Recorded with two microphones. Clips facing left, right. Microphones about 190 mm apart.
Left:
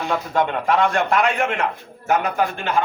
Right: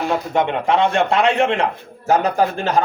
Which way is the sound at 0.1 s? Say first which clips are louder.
Even; 20° right (ahead or behind).